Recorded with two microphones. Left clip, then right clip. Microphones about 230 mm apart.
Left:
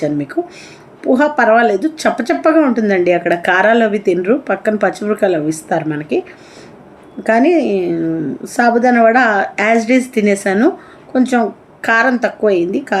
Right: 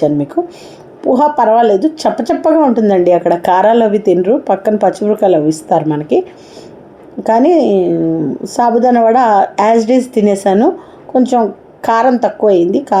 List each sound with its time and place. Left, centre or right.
1.0 s speech: centre